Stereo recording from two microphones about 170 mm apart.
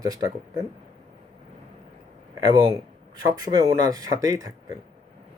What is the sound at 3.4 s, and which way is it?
Speech, 20° right (ahead or behind).